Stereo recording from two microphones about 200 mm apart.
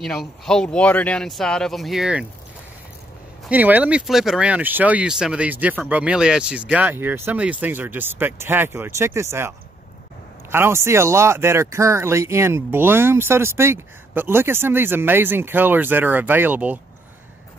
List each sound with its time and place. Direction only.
0.0 s speech: centre (ahead or behind)
3.4 s speech: 10° right (ahead or behind)
10.5 s speech: 10° right (ahead or behind)